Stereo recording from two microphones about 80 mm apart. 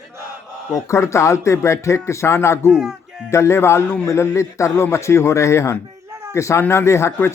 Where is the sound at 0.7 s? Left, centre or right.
Left.